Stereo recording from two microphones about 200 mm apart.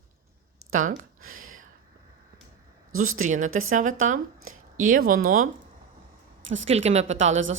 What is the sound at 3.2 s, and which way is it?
Speech, 40° right (ahead or behind).